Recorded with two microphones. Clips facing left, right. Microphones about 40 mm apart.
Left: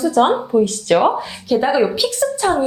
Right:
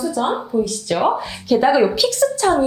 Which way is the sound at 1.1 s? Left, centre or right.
Centre.